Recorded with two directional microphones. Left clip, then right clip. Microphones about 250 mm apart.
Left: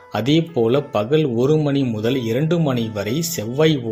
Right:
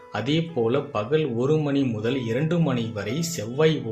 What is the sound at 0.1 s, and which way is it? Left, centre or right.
Speech, left.